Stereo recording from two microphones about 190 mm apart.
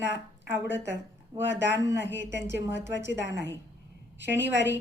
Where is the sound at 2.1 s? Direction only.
70° right (ahead or behind).